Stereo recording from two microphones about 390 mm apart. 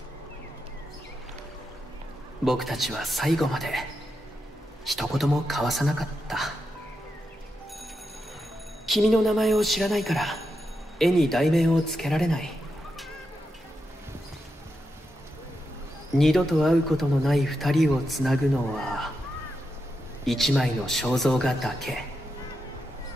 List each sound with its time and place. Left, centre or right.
2.4 s speech: centre
4.8 s speech: centre
8.8 s speech: centre
16.2 s speech: centre
20.2 s speech: centre